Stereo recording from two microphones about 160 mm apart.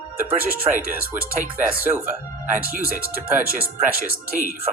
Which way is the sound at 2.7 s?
55° right (ahead or behind).